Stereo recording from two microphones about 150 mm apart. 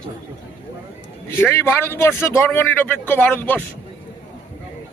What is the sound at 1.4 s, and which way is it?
A man's voice, 15° left (ahead or behind).